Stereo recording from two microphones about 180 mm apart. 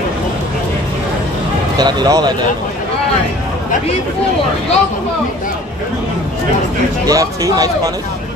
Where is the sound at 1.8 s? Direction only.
25° right (ahead or behind).